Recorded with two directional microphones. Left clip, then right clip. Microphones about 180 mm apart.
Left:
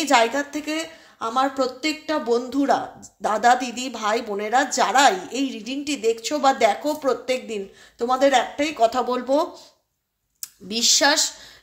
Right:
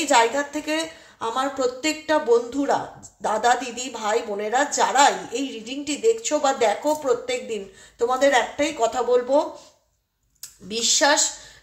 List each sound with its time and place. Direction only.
0.0 s a woman's voice: 35° left (ahead or behind)